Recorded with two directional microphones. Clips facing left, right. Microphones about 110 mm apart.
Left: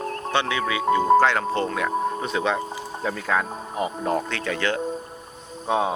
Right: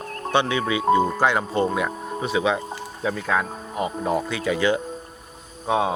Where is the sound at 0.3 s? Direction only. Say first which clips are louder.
Right 3 dB; 20° right (ahead or behind).